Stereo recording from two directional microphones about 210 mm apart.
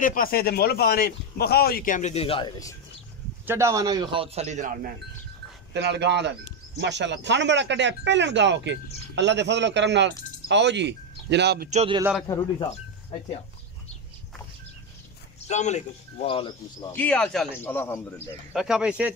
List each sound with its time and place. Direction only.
0.0 s speech: 40° left (ahead or behind); by 2.7 s 20° left (ahead or behind)
3.4 s speech: 15° right (ahead or behind); by 4.9 s 35° right (ahead or behind)
5.7 s speech: 55° right (ahead or behind)
11.7 s speech: 30° right (ahead or behind)
12.0 s speech: 5° right (ahead or behind)
15.4 s speech: 35° left (ahead or behind)
16.9 s a man's voice: 5° left (ahead or behind)
18.5 s speech: 5° right (ahead or behind)